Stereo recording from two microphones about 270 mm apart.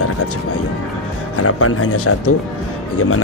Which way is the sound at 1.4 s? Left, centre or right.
Left.